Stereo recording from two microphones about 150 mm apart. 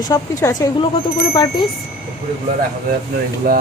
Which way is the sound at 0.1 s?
20° left (ahead or behind).